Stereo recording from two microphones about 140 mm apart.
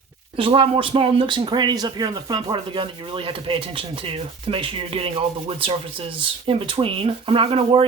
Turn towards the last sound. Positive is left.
turn(degrees=-40)  # may be behind; listen again after turning